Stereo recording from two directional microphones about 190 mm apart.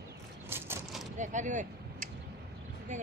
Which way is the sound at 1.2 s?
40° right (ahead or behind).